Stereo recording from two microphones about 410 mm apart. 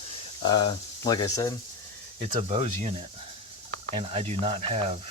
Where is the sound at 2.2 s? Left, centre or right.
Centre.